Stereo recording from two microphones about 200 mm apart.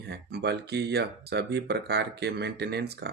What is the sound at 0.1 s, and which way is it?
Speech, 55° right (ahead or behind).